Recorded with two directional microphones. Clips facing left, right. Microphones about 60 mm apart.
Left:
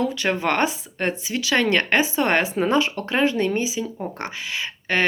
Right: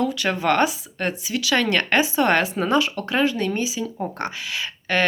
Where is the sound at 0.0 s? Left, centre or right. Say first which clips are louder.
Even; left.